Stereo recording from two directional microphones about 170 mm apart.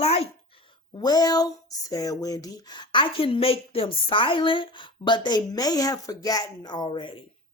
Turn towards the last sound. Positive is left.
turn(degrees=30)  # may be behind; listen again after turning